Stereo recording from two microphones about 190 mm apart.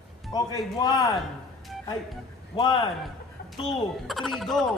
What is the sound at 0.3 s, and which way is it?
Speech, 20° left (ahead or behind).